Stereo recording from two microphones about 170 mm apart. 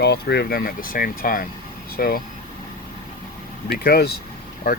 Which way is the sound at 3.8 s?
65° left (ahead or behind).